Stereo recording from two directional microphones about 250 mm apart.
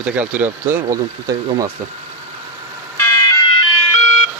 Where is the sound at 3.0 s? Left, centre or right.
Centre.